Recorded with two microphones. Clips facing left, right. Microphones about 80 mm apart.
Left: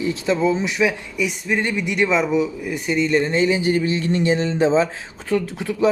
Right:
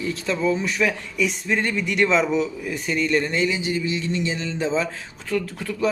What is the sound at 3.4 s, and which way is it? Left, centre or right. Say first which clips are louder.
Speech: left 5 dB; left.